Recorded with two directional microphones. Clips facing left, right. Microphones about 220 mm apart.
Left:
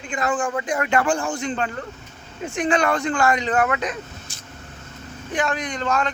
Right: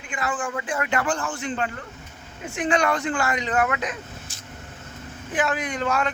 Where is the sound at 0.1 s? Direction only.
35° left (ahead or behind).